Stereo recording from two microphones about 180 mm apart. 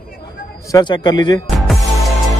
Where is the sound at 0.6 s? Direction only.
25° left (ahead or behind).